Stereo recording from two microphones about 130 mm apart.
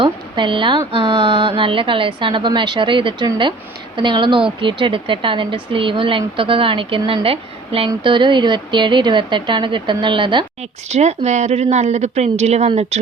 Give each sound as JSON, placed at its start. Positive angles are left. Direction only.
{"t": 0.0, "sound": "a sound", "side_deg": -40}
{"t": 0.9, "sound": "speech", "side_deg": -40}
{"t": 10.8, "sound": "a woman's voice", "side_deg": -60}